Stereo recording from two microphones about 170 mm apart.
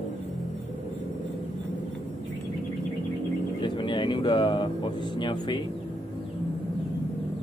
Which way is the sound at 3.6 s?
25° left (ahead or behind).